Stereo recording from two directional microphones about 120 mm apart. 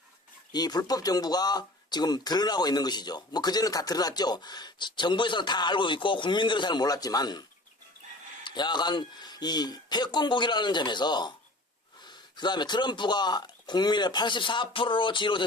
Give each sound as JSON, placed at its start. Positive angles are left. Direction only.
{"t": 0.5, "sound": "speech", "side_deg": 35}
{"t": 8.4, "sound": "speech", "side_deg": 40}